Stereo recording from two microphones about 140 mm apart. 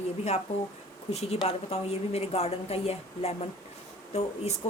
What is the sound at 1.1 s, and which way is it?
Speech, 50° left (ahead or behind).